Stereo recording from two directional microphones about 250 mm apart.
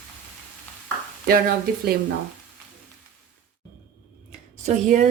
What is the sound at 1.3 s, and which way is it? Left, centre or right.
Speech, right.